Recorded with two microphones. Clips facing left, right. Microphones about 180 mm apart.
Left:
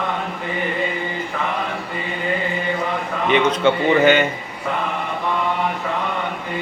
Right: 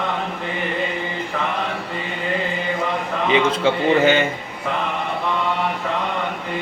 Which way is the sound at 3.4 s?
30° right (ahead or behind).